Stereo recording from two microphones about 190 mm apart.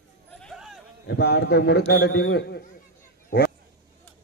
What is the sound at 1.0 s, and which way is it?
A man's voice, 55° left (ahead or behind).